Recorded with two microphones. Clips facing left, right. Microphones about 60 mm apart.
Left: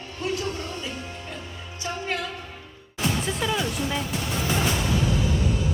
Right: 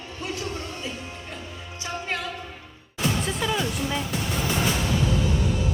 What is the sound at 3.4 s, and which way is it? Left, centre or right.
Speech, centre.